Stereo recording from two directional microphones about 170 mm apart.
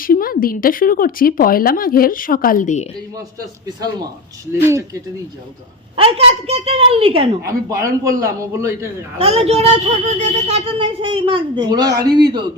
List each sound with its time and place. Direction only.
0.0 s speech: 55° left (ahead or behind)
6.0 s speech: 35° right (ahead or behind)
7.4 s a man's voice: 20° right (ahead or behind)
9.1 s speech: 35° right (ahead or behind)